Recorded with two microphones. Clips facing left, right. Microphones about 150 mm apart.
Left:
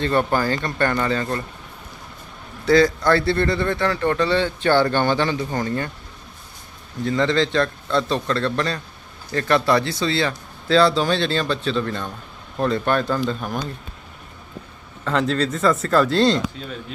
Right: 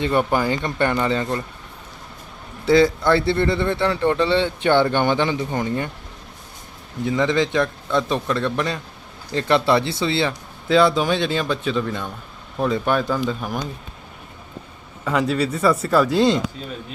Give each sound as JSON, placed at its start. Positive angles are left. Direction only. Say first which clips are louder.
{"t": 0.0, "sound": "speech", "louder": "even", "side_deg": -15}
{"t": 2.6, "sound": "a man's voice", "louder": "even", "side_deg": -20}
{"t": 7.0, "sound": "speech", "louder": "even", "side_deg": -15}
{"t": 15.0, "sound": "speech", "louder": "even", "side_deg": -10}